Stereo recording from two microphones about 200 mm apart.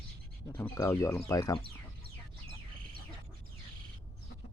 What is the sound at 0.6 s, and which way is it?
Speech, 15° left (ahead or behind).